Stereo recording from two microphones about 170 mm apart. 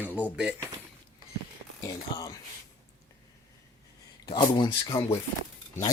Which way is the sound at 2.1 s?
25° left (ahead or behind).